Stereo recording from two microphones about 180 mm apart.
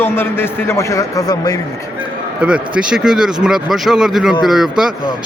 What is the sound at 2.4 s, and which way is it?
A man's voice, 5° right (ahead or behind).